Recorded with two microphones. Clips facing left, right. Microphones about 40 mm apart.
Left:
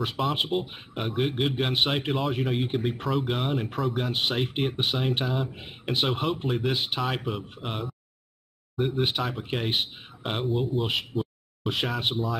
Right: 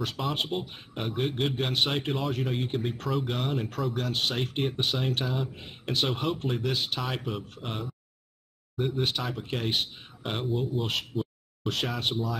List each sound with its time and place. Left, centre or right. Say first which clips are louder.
0.2 s speech: left 5 dB; centre
1.7 s a man's voice: left 2 dB; centre
2.0 s speech: left 2 dB; centre
7.1 s speech: left 3 dB; centre
11.1 s a sound: left 2 dB; centre
11.7 s speech: left 2 dB; centre